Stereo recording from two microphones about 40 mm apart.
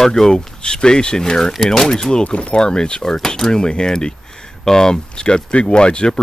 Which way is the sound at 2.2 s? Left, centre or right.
Left.